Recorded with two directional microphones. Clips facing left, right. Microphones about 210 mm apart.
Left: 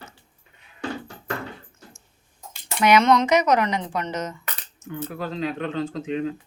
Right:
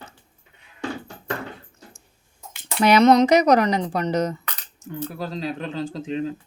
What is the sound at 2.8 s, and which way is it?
Speech, 35° right (ahead or behind).